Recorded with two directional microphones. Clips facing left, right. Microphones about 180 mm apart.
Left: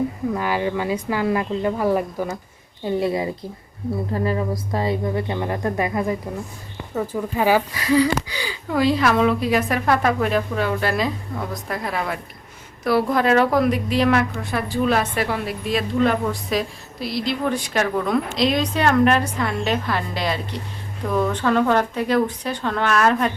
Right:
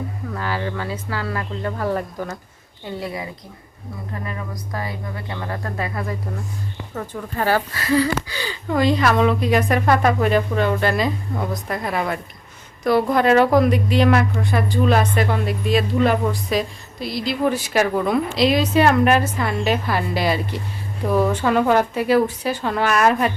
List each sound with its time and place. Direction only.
0.3 s speech: 15° left (ahead or behind)
2.8 s a woman's voice: 25° left (ahead or behind); by 23.3 s 10° right (ahead or behind)